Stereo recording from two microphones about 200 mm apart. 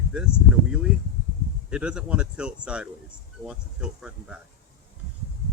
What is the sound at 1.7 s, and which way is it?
Speech, 5° right (ahead or behind).